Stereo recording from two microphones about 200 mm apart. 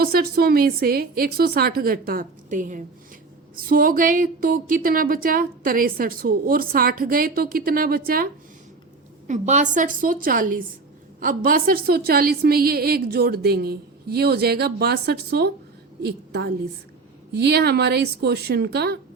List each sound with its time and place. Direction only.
0.0 s speech: 50° right (ahead or behind)